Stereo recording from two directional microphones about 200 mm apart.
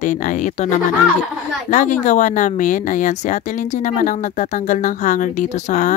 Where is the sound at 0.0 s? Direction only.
40° left (ahead or behind).